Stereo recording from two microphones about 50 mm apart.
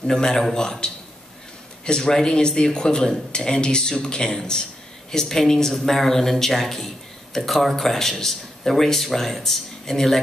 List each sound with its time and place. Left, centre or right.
0.0 s speech: centre